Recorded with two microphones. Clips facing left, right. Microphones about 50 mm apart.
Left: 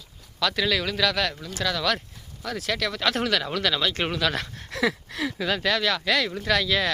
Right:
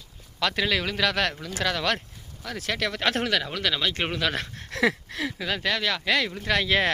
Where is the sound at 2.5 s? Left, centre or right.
Right.